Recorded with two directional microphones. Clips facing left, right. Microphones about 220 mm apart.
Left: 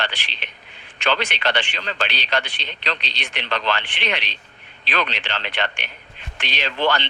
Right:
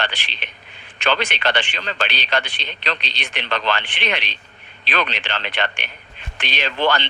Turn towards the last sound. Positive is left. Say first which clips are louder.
# right 1 dB
turn(degrees=-50)  # may be behind; listen again after turning